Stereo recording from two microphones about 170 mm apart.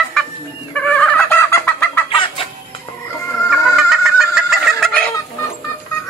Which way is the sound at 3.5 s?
Centre (ahead or behind).